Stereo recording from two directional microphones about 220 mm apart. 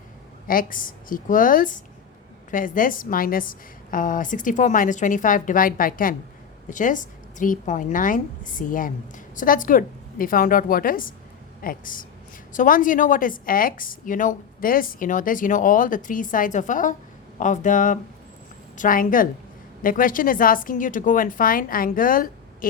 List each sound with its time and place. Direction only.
0.4 s speech: 40° left (ahead or behind)